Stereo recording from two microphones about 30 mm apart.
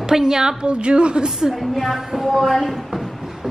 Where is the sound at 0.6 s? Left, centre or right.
Right.